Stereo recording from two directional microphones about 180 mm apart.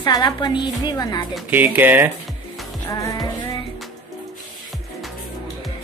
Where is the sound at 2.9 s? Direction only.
20° left (ahead or behind).